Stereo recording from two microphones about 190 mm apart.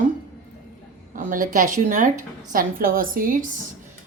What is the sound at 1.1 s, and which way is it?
A woman's voice, 45° right (ahead or behind).